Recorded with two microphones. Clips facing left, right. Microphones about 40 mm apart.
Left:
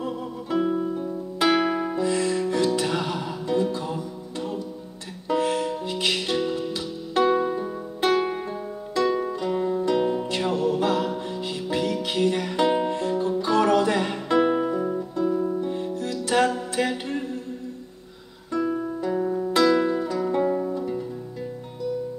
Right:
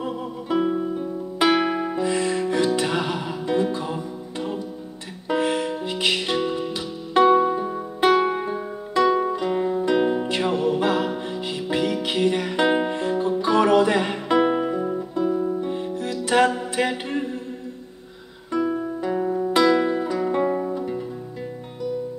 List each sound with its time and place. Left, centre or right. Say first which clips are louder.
0.0 s music: right 1 dB; centre
18.5 s music: right 2 dB; centre